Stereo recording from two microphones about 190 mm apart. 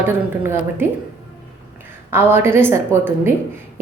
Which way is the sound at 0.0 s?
10° right (ahead or behind).